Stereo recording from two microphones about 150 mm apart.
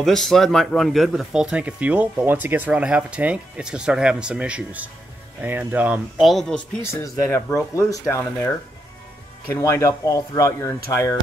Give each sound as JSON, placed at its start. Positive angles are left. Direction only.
{"t": 0.0, "sound": "speech", "side_deg": 0}
{"t": 6.8, "sound": "speech", "side_deg": 20}
{"t": 9.5, "sound": "speech", "side_deg": 20}